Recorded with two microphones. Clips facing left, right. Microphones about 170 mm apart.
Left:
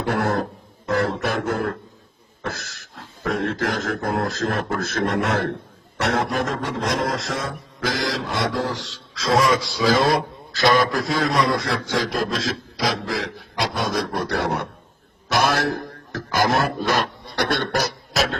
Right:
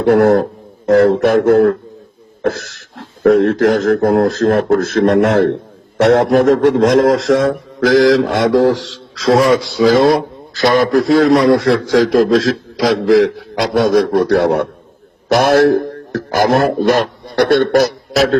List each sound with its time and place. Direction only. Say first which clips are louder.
0.9 s speech: right 13 dB; 75° right (ahead or behind)
2.9 s a man's voice: right 16 dB; 60° right (ahead or behind)
9.6 s speech: right 9 dB; 50° right (ahead or behind)
11.1 s speech: right 14 dB; 65° right (ahead or behind)
11.6 s a man's voice: right 12 dB; 90° right; by 18.3 s 70° right (ahead or behind)